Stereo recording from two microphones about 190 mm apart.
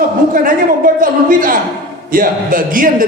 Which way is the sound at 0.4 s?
45° right (ahead or behind).